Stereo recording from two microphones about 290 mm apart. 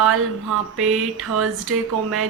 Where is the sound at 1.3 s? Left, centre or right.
Right.